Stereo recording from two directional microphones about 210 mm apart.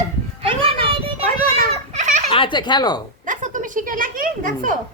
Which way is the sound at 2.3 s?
25° left (ahead or behind).